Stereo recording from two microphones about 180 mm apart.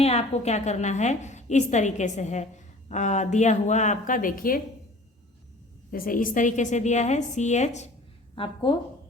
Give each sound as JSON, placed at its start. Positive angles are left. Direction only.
{"t": 0.0, "sound": "a woman's voice", "side_deg": 35}
{"t": 5.9, "sound": "a woman's voice", "side_deg": 50}
{"t": 8.4, "sound": "a woman's voice", "side_deg": 25}